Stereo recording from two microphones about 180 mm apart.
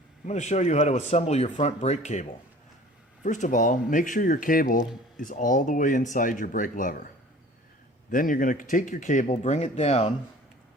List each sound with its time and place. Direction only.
0.3 s speech: 40° left (ahead or behind)
3.2 s speech: 45° left (ahead or behind)
8.1 s speech: 50° left (ahead or behind)